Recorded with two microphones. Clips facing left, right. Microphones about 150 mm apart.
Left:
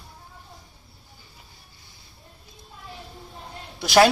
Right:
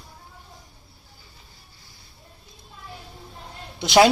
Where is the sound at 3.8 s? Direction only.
20° right (ahead or behind).